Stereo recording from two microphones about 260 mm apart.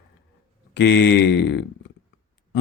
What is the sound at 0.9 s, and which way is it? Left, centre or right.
Speech, left.